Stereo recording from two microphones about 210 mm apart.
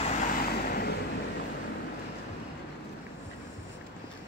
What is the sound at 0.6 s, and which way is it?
Vehicle, 45° left (ahead or behind).